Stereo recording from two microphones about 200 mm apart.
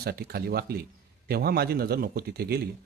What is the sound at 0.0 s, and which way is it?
A man's voice, 50° right (ahead or behind).